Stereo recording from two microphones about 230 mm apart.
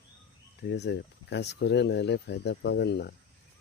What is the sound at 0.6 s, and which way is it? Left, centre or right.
Speech, left.